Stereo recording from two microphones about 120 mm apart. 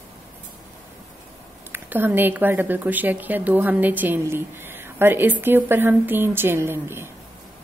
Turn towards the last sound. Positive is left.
turn(degrees=-20)  # may be behind; listen again after turning